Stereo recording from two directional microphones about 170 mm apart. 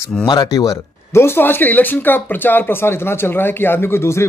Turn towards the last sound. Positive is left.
turn(degrees=15)  # may be behind; listen again after turning